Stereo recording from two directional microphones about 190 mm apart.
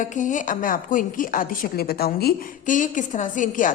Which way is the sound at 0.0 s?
40° left (ahead or behind).